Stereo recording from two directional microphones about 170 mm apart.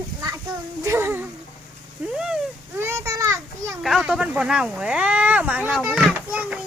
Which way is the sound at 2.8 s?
15° right (ahead or behind).